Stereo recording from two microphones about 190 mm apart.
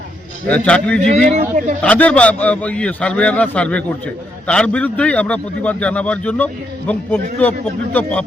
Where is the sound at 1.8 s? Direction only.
5° left (ahead or behind).